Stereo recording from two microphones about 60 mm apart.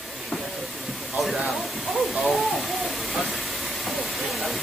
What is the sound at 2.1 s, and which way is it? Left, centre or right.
Speech, centre.